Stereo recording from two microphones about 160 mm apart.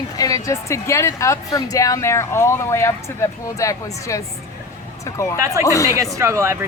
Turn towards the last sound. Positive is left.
turn(degrees=-20)  # may be behind; listen again after turning